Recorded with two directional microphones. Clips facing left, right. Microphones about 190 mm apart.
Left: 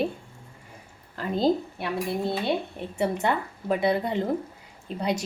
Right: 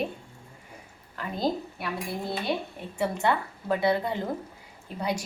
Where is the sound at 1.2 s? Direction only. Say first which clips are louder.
Left 5 dB; 25° left (ahead or behind).